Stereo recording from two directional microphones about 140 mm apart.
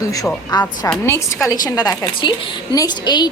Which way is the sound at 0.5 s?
30° left (ahead or behind).